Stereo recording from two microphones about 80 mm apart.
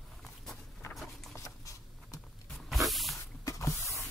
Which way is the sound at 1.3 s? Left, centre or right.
Left.